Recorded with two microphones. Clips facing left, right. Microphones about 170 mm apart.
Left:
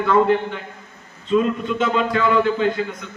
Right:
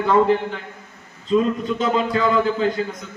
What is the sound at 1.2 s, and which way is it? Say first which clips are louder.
Speech: even; 35° right (ahead or behind).